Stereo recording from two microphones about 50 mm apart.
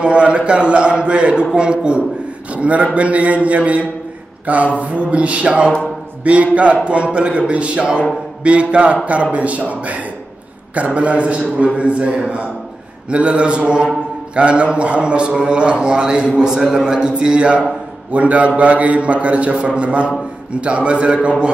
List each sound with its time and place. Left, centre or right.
0.0 s a man's voice: right